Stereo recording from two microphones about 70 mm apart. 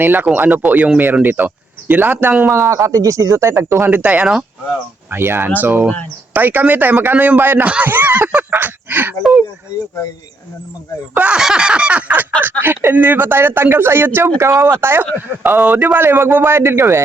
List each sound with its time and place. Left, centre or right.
0.0 s speech: right
2.5 s speech: right
4.0 s speech: centre
5.1 s speech: right
11.1 s a sound: centre
12.4 s speech: right